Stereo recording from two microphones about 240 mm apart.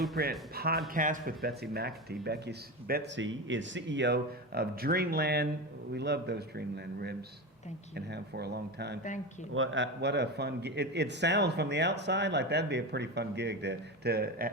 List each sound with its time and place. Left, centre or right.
0.2 s a man's voice: right